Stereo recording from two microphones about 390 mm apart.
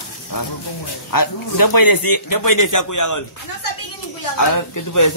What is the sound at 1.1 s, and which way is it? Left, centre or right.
A man's voice, left.